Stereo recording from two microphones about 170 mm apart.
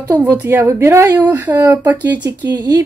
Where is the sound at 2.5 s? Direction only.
25° right (ahead or behind).